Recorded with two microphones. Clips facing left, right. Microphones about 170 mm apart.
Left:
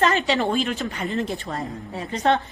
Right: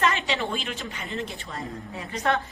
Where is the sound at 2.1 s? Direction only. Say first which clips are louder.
Left 5 dB; 30° left (ahead or behind).